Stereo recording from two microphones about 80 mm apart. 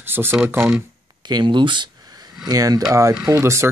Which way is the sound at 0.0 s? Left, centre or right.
Right.